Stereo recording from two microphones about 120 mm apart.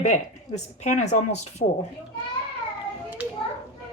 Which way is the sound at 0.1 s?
75° left (ahead or behind).